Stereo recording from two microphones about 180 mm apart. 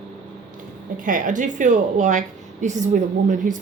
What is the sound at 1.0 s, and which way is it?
Speech, 50° right (ahead or behind).